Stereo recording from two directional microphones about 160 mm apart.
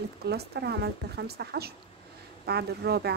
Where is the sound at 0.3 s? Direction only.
90° right.